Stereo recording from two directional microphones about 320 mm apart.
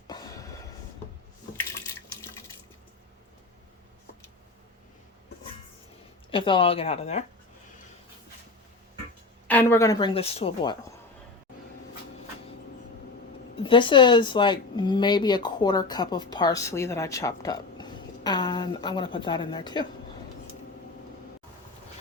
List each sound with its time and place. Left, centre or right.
0.1 s a sound: centre
6.3 s speech: centre
9.5 s speech: centre
13.6 s speech: centre